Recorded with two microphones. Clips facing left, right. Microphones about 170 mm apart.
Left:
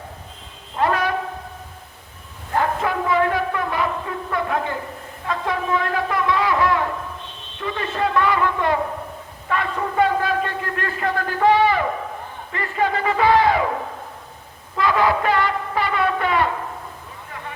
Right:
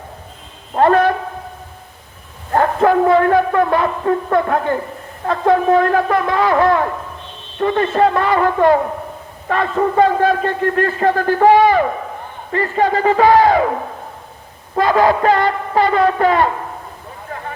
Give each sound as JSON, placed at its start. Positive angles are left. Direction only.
{"t": 0.7, "sound": "a woman's voice", "side_deg": -50}
{"t": 2.5, "sound": "a man's voice", "side_deg": -50}
{"t": 14.8, "sound": "speech", "side_deg": -40}